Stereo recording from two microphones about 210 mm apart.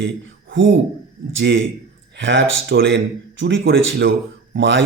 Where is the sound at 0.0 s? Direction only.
60° right (ahead or behind).